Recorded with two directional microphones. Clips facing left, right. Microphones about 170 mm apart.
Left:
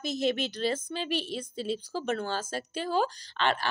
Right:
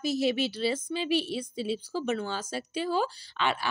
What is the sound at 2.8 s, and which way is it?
Speech, 45° left (ahead or behind).